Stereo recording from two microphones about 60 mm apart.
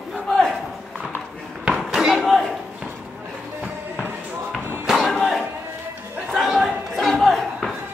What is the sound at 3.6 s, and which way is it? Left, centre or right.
Music, right.